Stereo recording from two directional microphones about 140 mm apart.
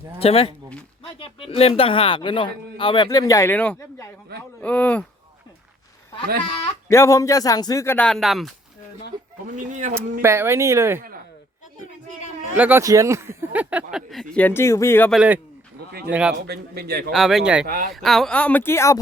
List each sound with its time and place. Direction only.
0.2 s speech: 45° left (ahead or behind); by 4.1 s 20° left (ahead or behind)
4.6 s speech: 10° left (ahead or behind)
6.8 s speech: 20° left (ahead or behind)
7.9 s speech: 5° left (ahead or behind)
9.6 s speech: 65° right (ahead or behind)
10.2 s speech: 15° right (ahead or behind)
12.5 s speech: 10° right (ahead or behind)
12.8 s speech: 25° right (ahead or behind); by 14.4 s centre (ahead or behind)
14.4 s speech: 20° left (ahead or behind)
15.1 s speech: 10° right (ahead or behind)
17.7 s speech: 90° right
17.9 s speech: centre (ahead or behind); by 18.9 s 20° left (ahead or behind)